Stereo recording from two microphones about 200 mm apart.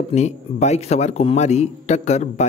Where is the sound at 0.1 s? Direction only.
35° left (ahead or behind).